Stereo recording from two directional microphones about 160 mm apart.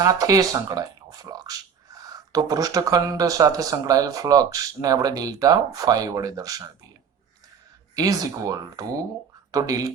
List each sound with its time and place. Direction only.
0.0 s speech: 20° right (ahead or behind)
7.9 s speech: 20° right (ahead or behind)